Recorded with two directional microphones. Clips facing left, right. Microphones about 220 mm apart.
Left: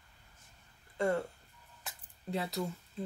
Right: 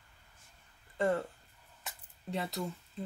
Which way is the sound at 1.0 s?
Centre (ahead or behind).